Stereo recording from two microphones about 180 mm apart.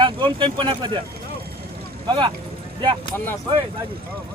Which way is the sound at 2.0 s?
25° right (ahead or behind).